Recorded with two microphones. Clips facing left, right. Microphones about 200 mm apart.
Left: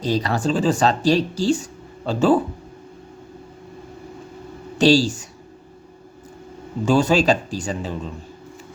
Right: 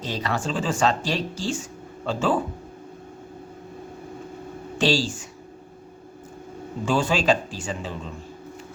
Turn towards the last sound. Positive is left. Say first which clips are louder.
# left 5 dB
turn(degrees=40)  # may be behind; listen again after turning